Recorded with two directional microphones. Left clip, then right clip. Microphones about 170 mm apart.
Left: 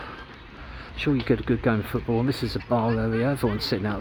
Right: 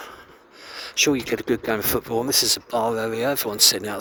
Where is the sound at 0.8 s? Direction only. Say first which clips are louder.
Right 4 dB; 45° right (ahead or behind).